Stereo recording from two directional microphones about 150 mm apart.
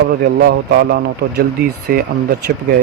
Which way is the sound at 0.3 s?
90° right.